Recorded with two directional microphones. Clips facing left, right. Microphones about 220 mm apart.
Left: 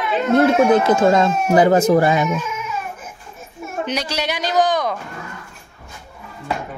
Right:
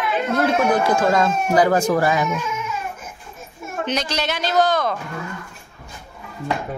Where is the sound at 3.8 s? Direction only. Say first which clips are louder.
Right 1 dB; 10° left (ahead or behind).